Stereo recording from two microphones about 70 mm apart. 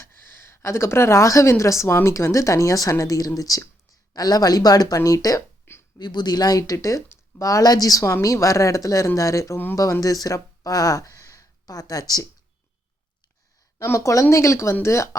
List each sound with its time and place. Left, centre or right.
0.0 s a woman's voice: left
4.9 s speech: left
5.7 s a sound: left
6.0 s speech: left
6.8 s speech: left
13.7 s speech: left